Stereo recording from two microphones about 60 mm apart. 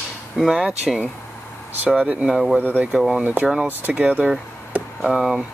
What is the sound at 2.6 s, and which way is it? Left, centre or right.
Speech, right.